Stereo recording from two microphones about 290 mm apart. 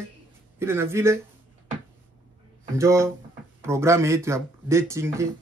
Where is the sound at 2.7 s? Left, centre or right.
Centre.